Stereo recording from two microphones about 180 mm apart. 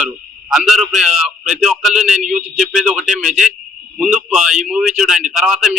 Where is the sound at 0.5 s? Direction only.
Centre (ahead or behind).